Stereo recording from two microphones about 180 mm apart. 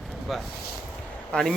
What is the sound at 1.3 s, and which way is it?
Speech, 5° left (ahead or behind).